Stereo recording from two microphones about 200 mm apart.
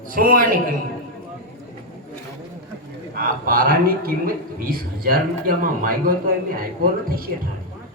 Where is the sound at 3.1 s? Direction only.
45° right (ahead or behind).